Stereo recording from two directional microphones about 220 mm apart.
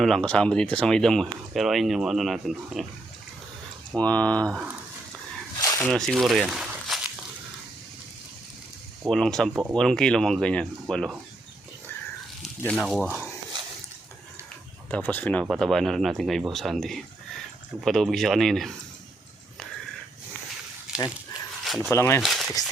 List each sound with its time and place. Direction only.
0.0 s speech: 5° left (ahead or behind)
3.9 s speech: 5° left (ahead or behind)
5.5 s a sound: 15° left (ahead or behind)
5.9 s speech: centre (ahead or behind)
9.0 s speech: centre (ahead or behind)
12.4 s speech: centre (ahead or behind)
14.8 s speech: 5° left (ahead or behind)
20.9 s a sound: 5° right (ahead or behind)
21.9 s speech: 10° left (ahead or behind)
22.2 s a sound: centre (ahead or behind)